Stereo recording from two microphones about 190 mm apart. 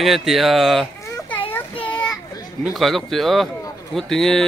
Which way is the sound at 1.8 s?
25° left (ahead or behind).